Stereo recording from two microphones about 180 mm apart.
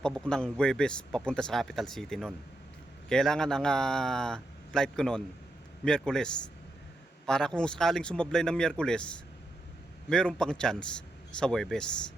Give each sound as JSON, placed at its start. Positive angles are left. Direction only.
{"t": 0.0, "sound": "speech", "side_deg": 5}